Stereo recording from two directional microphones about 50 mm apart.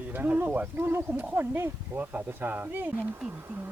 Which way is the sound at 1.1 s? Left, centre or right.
Right.